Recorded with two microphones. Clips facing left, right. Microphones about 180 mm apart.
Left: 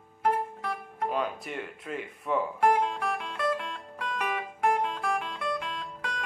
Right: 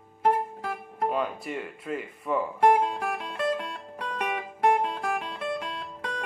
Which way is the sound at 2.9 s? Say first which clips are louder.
Right 1 dB; 40° right (ahead or behind).